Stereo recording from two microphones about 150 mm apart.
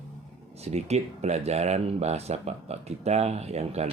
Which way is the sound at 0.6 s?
45° right (ahead or behind).